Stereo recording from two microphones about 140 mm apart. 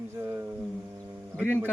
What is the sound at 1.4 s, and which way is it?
Speech, 15° left (ahead or behind).